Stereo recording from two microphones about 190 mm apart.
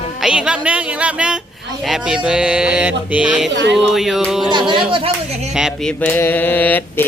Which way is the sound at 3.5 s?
70° right (ahead or behind).